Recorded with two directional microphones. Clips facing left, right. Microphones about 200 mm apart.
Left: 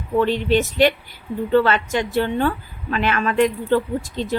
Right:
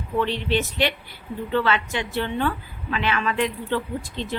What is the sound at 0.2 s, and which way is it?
A woman's voice, 45° left (ahead or behind).